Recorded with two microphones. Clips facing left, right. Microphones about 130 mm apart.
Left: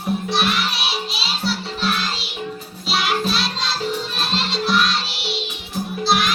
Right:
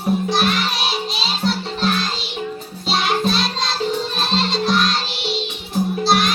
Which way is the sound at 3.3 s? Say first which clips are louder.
Right 2 dB; 35° right (ahead or behind).